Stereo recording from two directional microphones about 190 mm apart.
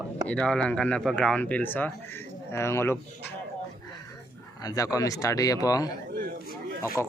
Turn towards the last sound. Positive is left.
turn(degrees=-10)  # may be behind; listen again after turning